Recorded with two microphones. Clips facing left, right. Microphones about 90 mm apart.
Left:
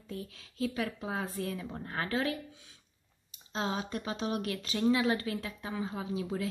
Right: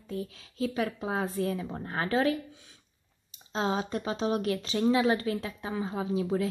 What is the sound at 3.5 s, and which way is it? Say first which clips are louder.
Speech: right 5 dB; 30° right (ahead or behind).